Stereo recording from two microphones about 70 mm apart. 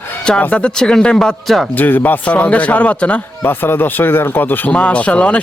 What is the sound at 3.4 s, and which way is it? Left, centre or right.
Speech, left.